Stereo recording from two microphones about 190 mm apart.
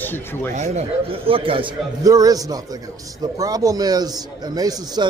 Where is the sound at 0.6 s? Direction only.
35° right (ahead or behind).